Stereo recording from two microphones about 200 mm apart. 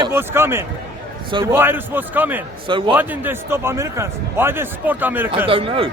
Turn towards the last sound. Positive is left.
turn(degrees=-25)  # may be behind; listen again after turning